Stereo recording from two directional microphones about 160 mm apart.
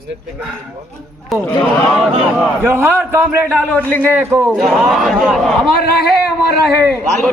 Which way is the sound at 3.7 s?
10° left (ahead or behind).